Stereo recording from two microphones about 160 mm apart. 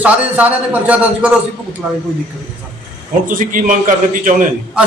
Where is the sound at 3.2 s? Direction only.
55° right (ahead or behind).